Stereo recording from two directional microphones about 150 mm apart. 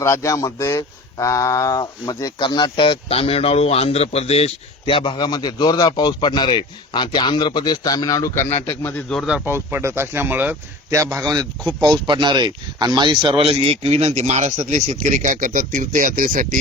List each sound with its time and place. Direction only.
0.0 s speech: 20° left (ahead or behind)
8.4 s a man's voice: 45° left (ahead or behind)
8.7 s a man's voice: 15° left (ahead or behind)
9.2 s speech: 5° right (ahead or behind)
11.3 s speech: 30° right (ahead or behind); by 16.6 s 65° right (ahead or behind)